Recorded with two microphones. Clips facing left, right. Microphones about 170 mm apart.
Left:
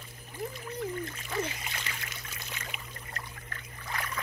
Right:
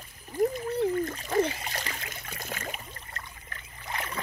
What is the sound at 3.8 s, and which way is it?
Boat, 25° right (ahead or behind).